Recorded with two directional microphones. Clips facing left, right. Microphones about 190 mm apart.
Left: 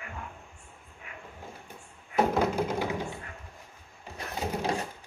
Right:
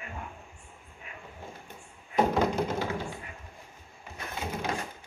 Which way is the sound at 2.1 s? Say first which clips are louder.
Even; 5° left (ahead or behind).